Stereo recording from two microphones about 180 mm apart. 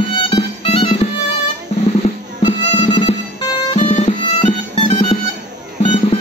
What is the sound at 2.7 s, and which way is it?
Music, 25° left (ahead or behind).